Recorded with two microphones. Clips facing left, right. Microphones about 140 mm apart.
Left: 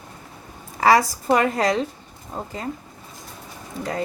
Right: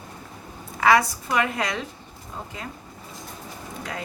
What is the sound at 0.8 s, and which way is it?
A woman's voice, 35° left (ahead or behind).